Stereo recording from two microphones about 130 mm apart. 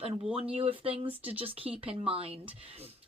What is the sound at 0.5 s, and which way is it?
A woman's voice, 45° right (ahead or behind).